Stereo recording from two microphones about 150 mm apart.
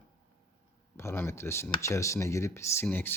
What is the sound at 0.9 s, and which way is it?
Speech, 15° left (ahead or behind).